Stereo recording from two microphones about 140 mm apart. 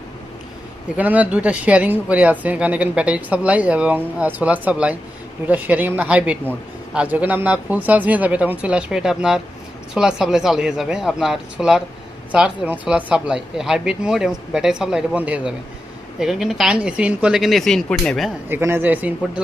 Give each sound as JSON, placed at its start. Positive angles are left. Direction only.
{"t": 0.9, "sound": "speech", "side_deg": -10}
{"t": 18.4, "sound": "speech", "side_deg": -15}